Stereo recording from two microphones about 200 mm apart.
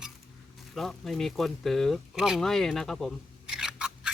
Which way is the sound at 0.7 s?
Centre (ahead or behind).